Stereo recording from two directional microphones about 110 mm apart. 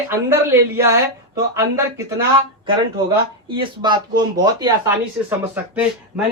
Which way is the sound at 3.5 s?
45° right (ahead or behind).